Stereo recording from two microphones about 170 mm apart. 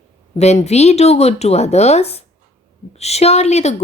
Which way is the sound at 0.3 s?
40° left (ahead or behind).